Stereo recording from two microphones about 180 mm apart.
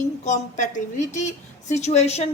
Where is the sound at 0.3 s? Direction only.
45° left (ahead or behind).